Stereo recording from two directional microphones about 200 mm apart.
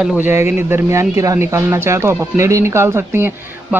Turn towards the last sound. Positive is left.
turn(degrees=-10)  # may be behind; listen again after turning